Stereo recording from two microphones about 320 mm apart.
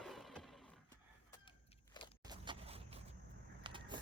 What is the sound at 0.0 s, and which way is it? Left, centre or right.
Roaring cats, centre.